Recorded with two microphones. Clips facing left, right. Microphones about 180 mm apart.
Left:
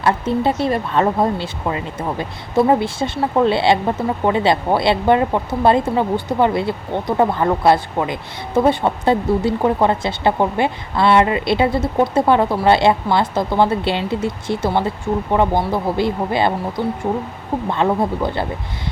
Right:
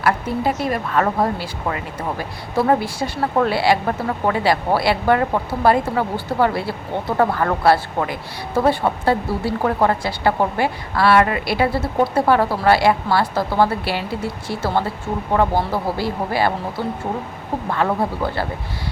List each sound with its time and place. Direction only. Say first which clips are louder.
0.0 s speech: left 2 dB; 25° left (ahead or behind)